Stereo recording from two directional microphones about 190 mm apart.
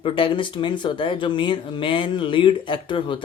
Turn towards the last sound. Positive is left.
turn(degrees=25)  # may be behind; listen again after turning